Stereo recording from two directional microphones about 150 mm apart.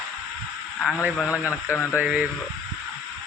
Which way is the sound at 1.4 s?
15° left (ahead or behind).